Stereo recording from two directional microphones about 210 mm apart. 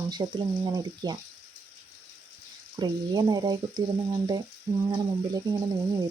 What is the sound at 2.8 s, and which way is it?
Speech, 20° right (ahead or behind).